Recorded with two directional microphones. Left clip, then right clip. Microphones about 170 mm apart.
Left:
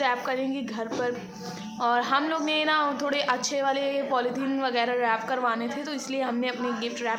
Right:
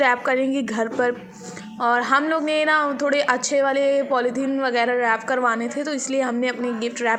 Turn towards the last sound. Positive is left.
turn(degrees=-30)  # may be behind; listen again after turning